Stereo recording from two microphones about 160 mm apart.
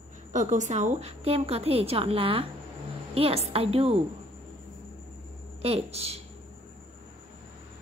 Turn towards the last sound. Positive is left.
turn(degrees=-40)  # may be behind; listen again after turning